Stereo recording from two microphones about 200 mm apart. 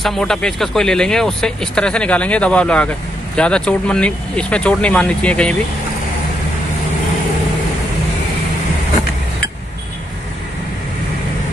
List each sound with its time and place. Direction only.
0.0 s speech: centre (ahead or behind)